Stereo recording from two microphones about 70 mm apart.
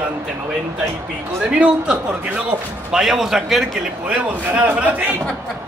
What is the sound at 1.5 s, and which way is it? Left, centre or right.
A man's voice, centre.